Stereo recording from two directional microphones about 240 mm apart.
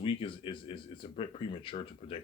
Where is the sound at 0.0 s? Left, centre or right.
Left.